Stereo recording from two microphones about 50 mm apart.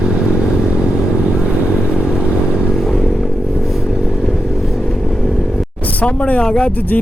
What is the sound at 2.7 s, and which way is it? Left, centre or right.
Vehicle, centre.